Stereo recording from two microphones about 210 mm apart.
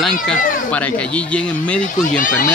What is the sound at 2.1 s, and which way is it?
Speech, 40° left (ahead or behind).